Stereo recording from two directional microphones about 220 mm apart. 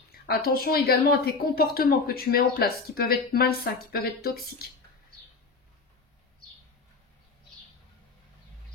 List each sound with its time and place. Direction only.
0.1 s a woman's voice: 45° left (ahead or behind)